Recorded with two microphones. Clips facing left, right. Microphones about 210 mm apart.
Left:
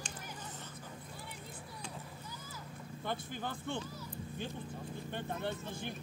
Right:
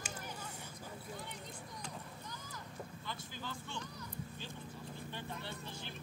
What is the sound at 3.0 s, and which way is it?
Vehicle, 55° left (ahead or behind).